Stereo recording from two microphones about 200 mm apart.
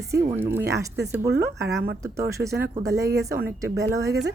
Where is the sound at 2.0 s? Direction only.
15° right (ahead or behind).